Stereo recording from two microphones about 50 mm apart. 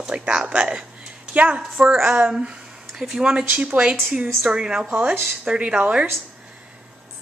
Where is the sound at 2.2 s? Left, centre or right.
Centre.